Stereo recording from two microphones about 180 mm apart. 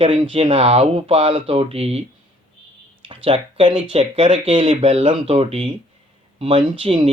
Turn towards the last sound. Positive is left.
turn(degrees=-30)  # may be behind; listen again after turning